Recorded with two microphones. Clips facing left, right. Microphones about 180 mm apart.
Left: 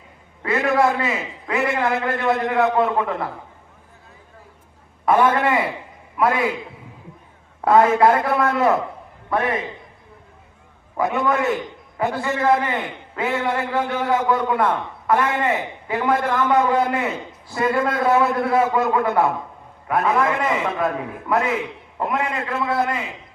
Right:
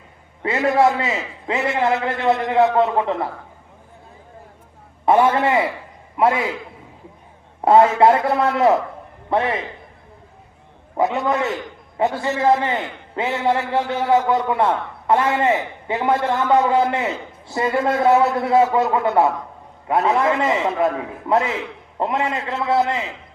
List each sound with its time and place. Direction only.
0.4 s a sound: 25° right (ahead or behind)
1.5 s a man's voice: 25° right (ahead or behind)
5.0 s a man's voice: 25° right (ahead or behind)
7.6 s a man's voice: 25° right (ahead or behind)
10.9 s a man's voice: 25° right (ahead or behind)